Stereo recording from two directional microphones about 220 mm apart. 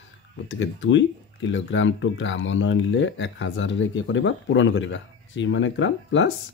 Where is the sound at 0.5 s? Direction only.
60° left (ahead or behind).